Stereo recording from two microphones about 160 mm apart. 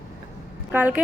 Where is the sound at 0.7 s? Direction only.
10° right (ahead or behind).